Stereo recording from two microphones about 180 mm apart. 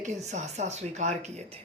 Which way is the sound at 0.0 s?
40° right (ahead or behind).